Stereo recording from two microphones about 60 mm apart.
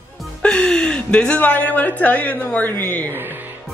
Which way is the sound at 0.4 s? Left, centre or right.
Centre.